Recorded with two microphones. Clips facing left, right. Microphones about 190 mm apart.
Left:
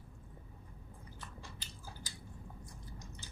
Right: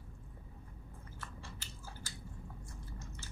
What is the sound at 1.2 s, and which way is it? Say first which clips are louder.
Biting: right 2 dB; 15° left (ahead or behind).